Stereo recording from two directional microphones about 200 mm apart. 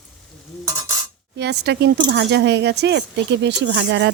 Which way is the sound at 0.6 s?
15° right (ahead or behind).